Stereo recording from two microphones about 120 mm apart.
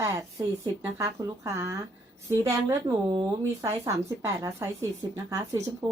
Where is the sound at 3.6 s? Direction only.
25° right (ahead or behind).